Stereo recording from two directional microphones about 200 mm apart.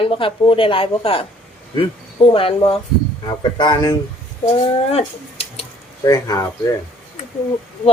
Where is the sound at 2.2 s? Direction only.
25° left (ahead or behind).